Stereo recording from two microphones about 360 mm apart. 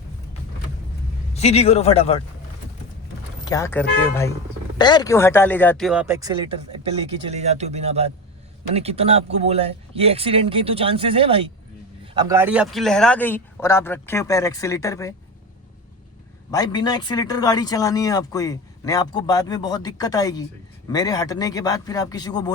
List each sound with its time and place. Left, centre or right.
1.3 s speech: centre
3.4 s a man's voice: centre
16.5 s speech: centre